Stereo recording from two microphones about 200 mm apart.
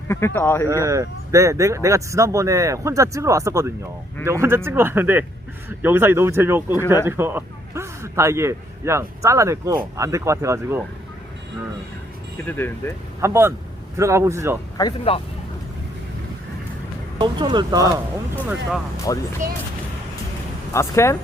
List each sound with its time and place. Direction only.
0.3 s speech: 10° left (ahead or behind)
0.7 s speech: 15° right (ahead or behind)
12.5 s speech: 10° left (ahead or behind)
13.2 s speech: 15° right (ahead or behind)
14.8 s speech: 25° left (ahead or behind)
17.2 s speech: 25° right (ahead or behind)
19.1 s speech: 15° left (ahead or behind)
20.7 s speech: 15° left (ahead or behind)